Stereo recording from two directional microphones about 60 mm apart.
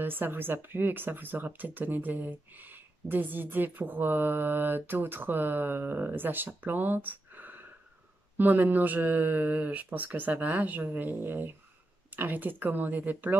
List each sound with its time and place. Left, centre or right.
0.0 s speech: right